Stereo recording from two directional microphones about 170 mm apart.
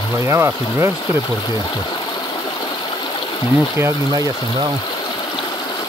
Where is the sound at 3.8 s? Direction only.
20° right (ahead or behind).